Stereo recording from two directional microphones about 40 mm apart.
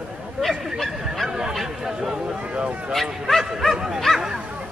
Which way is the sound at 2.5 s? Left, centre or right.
Right.